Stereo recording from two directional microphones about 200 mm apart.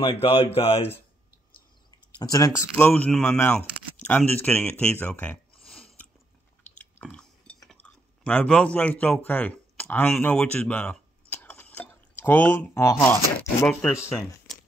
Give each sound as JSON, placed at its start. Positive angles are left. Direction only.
{"t": 0.0, "sound": "speech", "side_deg": 30}
{"t": 2.1, "sound": "speech", "side_deg": 20}
{"t": 2.8, "sound": "speech", "side_deg": 5}
{"t": 6.8, "sound": "chewing", "side_deg": 5}
{"t": 13.7, "sound": "speech", "side_deg": 5}